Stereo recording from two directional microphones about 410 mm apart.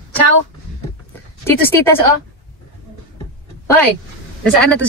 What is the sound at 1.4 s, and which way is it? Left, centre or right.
Speech, centre.